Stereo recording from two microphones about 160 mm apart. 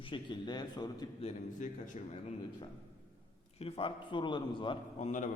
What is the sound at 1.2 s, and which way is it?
Speech, 50° left (ahead or behind).